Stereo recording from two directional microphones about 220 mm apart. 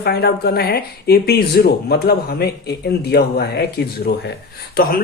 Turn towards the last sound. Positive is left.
turn(degrees=40)  # may be behind; listen again after turning